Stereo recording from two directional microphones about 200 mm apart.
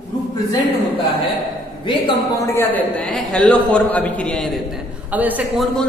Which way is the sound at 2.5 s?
10° left (ahead or behind).